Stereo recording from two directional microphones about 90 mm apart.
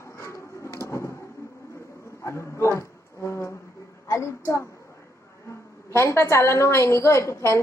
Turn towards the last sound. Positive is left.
turn(degrees=30)  # may be behind; listen again after turning